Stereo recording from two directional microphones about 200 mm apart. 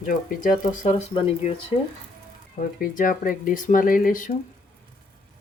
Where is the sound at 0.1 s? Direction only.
40° left (ahead or behind).